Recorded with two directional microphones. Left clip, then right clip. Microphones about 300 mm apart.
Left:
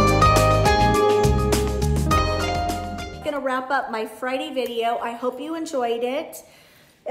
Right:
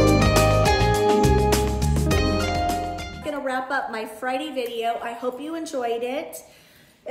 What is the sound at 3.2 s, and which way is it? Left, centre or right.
A woman's voice, centre.